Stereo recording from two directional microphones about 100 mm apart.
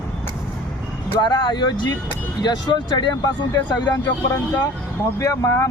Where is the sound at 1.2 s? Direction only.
50° left (ahead or behind).